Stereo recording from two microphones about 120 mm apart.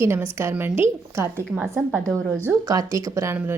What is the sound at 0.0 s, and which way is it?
A woman's voice, 20° right (ahead or behind).